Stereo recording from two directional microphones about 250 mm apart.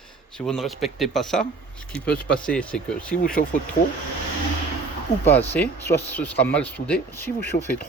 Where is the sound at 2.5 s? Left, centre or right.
Centre.